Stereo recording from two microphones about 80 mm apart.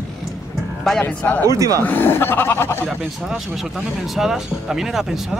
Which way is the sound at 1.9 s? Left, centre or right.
Left.